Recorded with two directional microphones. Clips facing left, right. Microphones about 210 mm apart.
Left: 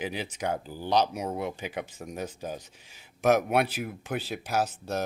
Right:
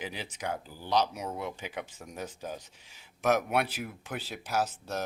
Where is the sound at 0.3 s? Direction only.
25° left (ahead or behind).